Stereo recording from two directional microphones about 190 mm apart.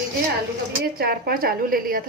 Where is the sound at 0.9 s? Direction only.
55° right (ahead or behind).